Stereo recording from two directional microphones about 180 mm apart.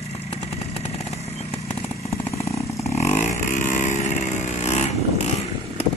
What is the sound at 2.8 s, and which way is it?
Vehicle, 40° left (ahead or behind).